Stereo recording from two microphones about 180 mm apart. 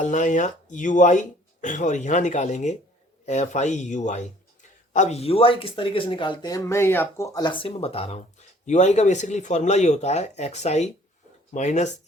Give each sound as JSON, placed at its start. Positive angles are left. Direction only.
{"t": 0.0, "sound": "speech", "side_deg": 45}